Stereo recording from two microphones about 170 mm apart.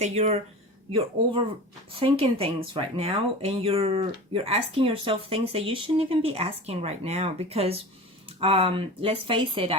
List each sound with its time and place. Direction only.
0.0 s speech: 40° right (ahead or behind)